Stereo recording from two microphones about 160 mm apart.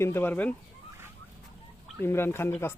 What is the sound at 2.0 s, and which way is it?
Speech, 15° left (ahead or behind).